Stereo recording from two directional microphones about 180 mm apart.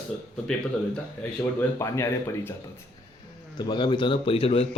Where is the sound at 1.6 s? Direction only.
15° left (ahead or behind).